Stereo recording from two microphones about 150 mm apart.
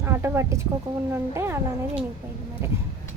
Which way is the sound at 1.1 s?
15° right (ahead or behind).